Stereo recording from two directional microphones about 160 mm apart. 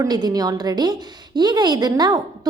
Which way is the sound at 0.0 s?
25° right (ahead or behind).